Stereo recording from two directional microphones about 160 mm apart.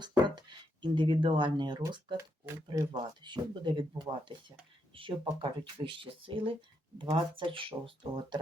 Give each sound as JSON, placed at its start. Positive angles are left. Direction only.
{"t": 0.3, "sound": "speech", "side_deg": -30}